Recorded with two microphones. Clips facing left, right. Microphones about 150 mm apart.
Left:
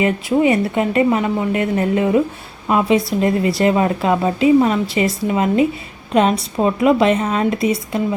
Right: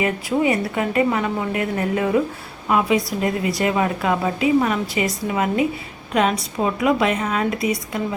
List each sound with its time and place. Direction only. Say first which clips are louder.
0.0 s speech: left 4 dB; 25° left (ahead or behind)